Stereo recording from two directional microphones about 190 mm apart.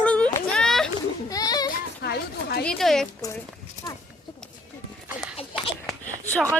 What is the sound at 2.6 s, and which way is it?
Speech, centre (ahead or behind).